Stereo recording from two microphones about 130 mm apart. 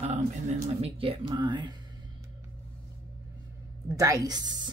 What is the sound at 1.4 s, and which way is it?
Speech, 35° right (ahead or behind).